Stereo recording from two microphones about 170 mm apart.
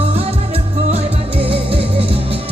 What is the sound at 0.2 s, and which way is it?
Music, 35° right (ahead or behind).